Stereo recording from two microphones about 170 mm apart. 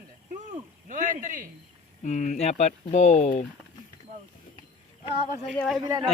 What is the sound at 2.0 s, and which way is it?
Speech, 45° left (ahead or behind).